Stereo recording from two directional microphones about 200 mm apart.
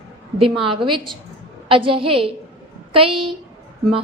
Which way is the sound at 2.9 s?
25° right (ahead or behind).